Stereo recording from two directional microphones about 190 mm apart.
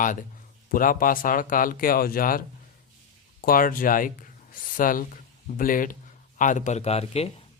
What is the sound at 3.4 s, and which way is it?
Speech, 50° left (ahead or behind).